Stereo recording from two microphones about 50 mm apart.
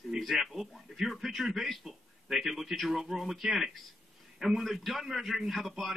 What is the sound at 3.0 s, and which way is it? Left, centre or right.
A man's voice, centre.